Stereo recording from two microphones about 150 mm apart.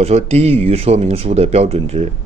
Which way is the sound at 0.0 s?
45° right (ahead or behind).